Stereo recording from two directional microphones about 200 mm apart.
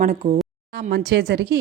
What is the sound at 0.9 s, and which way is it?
Speech, 55° right (ahead or behind).